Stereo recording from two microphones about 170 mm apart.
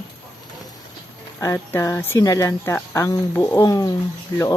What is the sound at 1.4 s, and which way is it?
Speech, 15° left (ahead or behind).